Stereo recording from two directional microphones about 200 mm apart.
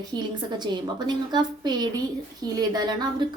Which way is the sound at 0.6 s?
20° right (ahead or behind).